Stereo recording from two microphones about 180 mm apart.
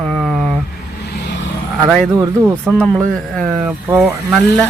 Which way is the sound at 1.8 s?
Centre (ahead or behind).